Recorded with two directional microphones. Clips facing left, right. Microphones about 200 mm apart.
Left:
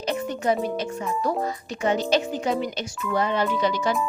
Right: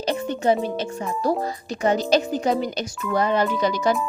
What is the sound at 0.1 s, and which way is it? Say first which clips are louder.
A woman's voice: right 3 dB; 30° right (ahead or behind).